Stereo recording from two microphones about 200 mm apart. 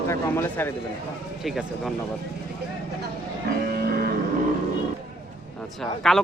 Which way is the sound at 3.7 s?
50° right (ahead or behind).